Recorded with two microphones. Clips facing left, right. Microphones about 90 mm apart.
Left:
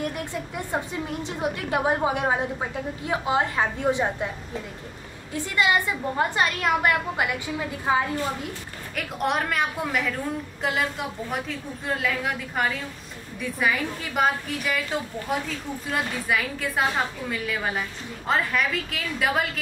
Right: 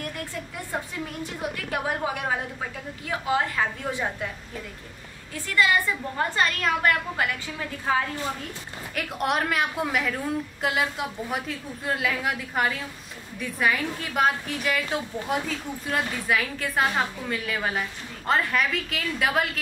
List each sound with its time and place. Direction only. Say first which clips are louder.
0.0 s a woman's voice: left 4 dB; 20° left (ahead or behind)
5.3 s a woman's voice: even; 20° left (ahead or behind)
8.9 s a woman's voice: even; centre (ahead or behind)